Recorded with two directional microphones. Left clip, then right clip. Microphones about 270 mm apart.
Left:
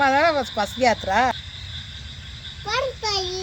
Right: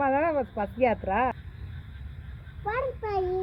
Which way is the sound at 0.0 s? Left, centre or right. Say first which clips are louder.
Left 7 dB; centre.